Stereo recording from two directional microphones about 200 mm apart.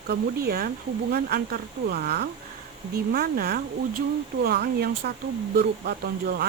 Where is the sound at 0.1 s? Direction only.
50° right (ahead or behind).